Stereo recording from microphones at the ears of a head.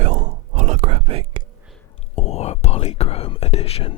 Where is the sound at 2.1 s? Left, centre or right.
Left.